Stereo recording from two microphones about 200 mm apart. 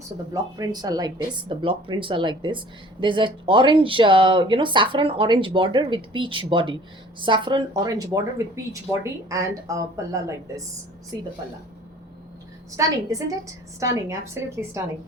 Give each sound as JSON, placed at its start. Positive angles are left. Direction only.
{"t": 0.5, "sound": "speech", "side_deg": -20}
{"t": 12.7, "sound": "speech", "side_deg": -15}